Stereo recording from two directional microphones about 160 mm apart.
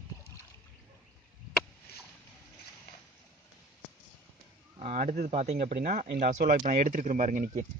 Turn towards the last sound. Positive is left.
turn(degrees=-55)  # may be behind; listen again after turning